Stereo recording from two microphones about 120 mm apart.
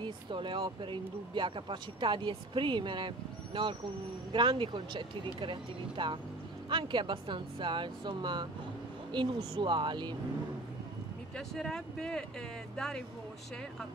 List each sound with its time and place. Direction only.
0.0 s speech: 40° right (ahead or behind)
11.3 s speech: 5° left (ahead or behind)